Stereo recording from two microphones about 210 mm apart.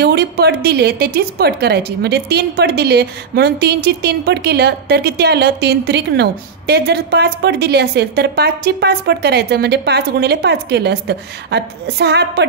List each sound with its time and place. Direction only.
0.0 s a woman's voice: 50° right (ahead or behind)